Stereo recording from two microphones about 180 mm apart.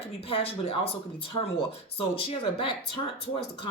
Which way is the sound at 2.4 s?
30° left (ahead or behind).